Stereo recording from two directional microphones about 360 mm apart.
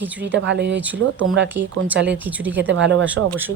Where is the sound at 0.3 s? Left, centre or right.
Right.